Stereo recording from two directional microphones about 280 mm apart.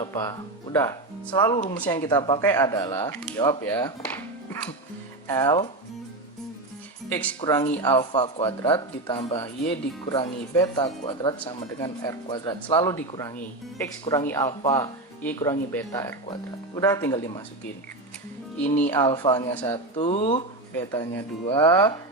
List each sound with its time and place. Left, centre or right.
0.0 s speech: centre
5.3 s speech: centre
7.1 s speech: centre
18.6 s speech: centre
19.0 s speech: centre
20.7 s speech: centre